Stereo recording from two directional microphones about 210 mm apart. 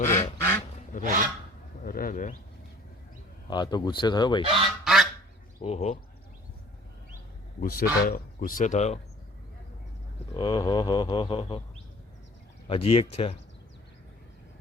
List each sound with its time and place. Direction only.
0.0 s duck: 10° left (ahead or behind)
0.9 s speech: 40° left (ahead or behind)
3.5 s speech: 20° left (ahead or behind)
4.5 s goose: centre (ahead or behind)
5.5 s speech: 30° left (ahead or behind)
7.6 s speech: 45° left (ahead or behind)
10.3 s speech: 20° left (ahead or behind)
12.6 s speech: 25° left (ahead or behind)